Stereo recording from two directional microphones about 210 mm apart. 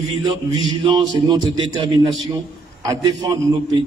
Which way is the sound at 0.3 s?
20° right (ahead or behind).